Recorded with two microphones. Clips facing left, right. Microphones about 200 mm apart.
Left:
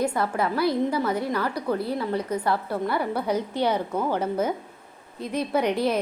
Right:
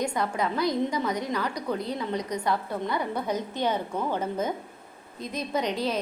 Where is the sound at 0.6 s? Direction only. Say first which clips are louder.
Left 3 dB; 5° left (ahead or behind).